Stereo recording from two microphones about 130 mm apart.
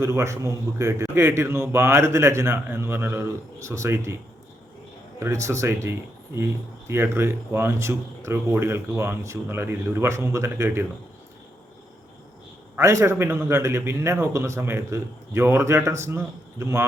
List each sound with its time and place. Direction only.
0.0 s speech: 20° right (ahead or behind)
5.2 s speech: 20° right (ahead or behind)
12.7 s speech: 25° right (ahead or behind)